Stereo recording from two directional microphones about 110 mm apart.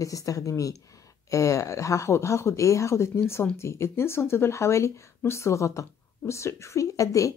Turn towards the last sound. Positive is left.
turn(degrees=30)  # may be behind; listen again after turning